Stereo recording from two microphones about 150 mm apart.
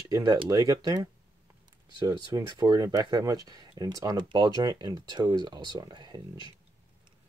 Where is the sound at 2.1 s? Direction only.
25° right (ahead or behind).